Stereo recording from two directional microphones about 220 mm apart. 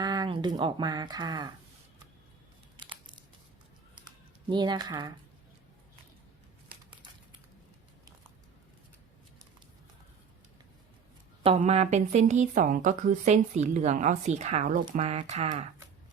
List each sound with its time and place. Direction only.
0.0 s speech: 20° right (ahead or behind)
2.7 s a sound: 20° right (ahead or behind)
4.0 s typing: 20° right (ahead or behind)
11.4 s a woman's voice: 30° right (ahead or behind)